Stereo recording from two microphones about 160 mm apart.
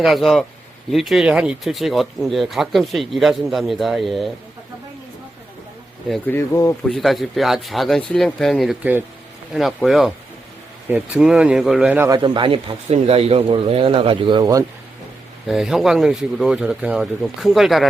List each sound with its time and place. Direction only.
0.0 s speech: centre (ahead or behind)
6.1 s speech: 10° left (ahead or behind)
6.8 s speech: centre (ahead or behind)
12.0 s speech: 25° right (ahead or behind)
15.4 s speech: centre (ahead or behind)